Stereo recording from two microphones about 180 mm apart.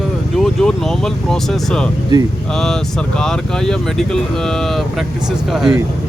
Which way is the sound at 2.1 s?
25° right (ahead or behind).